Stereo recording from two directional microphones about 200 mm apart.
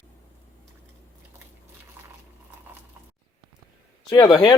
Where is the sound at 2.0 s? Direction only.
10° right (ahead or behind).